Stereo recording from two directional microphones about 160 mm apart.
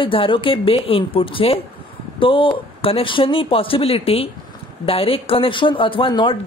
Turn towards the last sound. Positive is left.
turn(degrees=30)  # may be behind; listen again after turning